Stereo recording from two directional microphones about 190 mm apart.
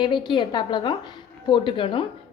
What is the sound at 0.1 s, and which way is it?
A woman's voice, 25° left (ahead or behind).